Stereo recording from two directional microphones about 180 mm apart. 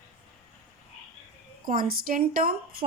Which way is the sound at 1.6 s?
50° right (ahead or behind).